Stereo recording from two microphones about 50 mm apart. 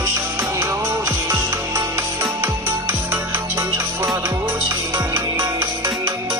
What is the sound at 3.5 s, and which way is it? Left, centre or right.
Music, right.